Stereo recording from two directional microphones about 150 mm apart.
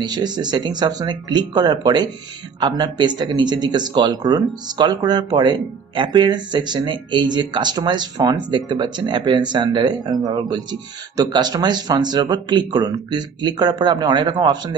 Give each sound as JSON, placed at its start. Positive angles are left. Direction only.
{"t": 0.0, "sound": "speech", "side_deg": -30}